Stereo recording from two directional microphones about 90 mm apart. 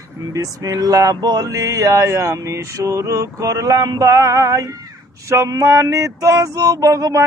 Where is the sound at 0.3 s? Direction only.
40° right (ahead or behind).